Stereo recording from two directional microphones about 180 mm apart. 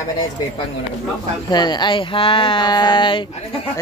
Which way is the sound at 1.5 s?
25° left (ahead or behind).